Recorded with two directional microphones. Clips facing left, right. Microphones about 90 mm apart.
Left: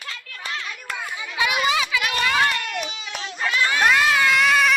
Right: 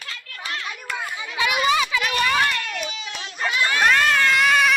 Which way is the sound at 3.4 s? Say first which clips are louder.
Even; 20° right (ahead or behind).